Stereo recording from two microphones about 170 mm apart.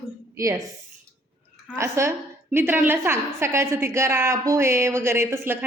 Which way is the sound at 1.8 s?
15° right (ahead or behind).